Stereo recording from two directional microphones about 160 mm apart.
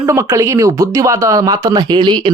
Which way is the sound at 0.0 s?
15° right (ahead or behind).